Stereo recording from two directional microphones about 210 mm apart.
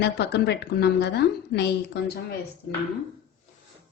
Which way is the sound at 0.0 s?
55° left (ahead or behind).